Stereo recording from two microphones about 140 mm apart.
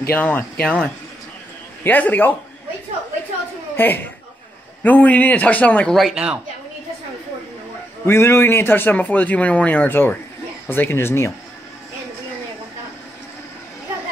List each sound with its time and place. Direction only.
0.1 s a man's voice: 10° left (ahead or behind)
1.9 s a man's voice: 10° left (ahead or behind)
3.7 s a man's voice: 15° left (ahead or behind)
5.9 s speech: centre (ahead or behind)
8.0 s a man's voice: 20° left (ahead or behind)